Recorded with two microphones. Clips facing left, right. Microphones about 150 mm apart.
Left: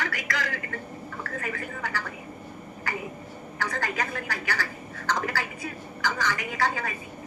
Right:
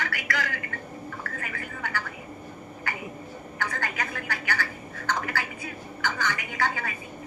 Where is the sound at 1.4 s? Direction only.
35° left (ahead or behind).